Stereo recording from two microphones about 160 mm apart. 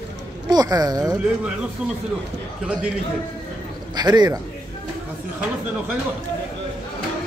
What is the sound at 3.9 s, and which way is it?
Speech, 25° right (ahead or behind).